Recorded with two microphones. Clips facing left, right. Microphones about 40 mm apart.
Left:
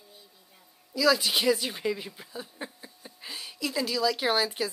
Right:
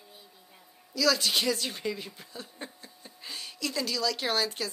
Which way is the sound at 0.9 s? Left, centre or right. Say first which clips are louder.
Left 2 dB; centre.